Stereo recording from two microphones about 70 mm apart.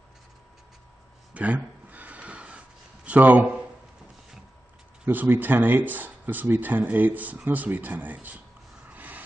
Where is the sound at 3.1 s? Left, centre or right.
Right.